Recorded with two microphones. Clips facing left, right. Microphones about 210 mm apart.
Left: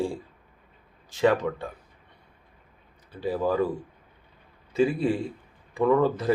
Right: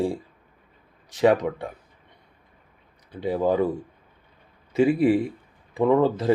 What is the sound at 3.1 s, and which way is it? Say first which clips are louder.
Speech: right 3 dB; 20° right (ahead or behind).